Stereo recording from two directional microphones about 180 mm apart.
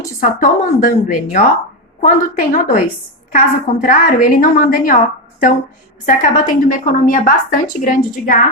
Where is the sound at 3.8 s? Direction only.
45° left (ahead or behind).